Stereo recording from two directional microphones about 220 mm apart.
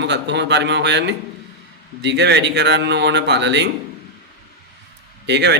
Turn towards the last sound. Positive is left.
turn(degrees=-50)  # may be behind; listen again after turning